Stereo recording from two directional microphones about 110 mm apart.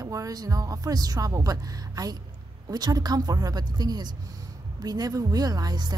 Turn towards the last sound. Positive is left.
turn(degrees=-40)  # may be behind; listen again after turning